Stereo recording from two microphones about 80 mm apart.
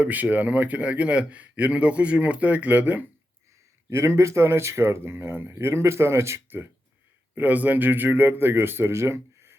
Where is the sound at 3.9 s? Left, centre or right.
Right.